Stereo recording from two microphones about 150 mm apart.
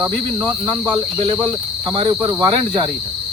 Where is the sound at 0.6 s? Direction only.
30° right (ahead or behind).